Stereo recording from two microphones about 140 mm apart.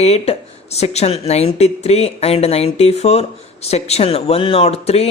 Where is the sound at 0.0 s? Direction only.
50° left (ahead or behind).